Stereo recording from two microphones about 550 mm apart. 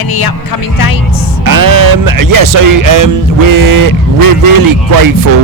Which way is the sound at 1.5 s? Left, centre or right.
Right.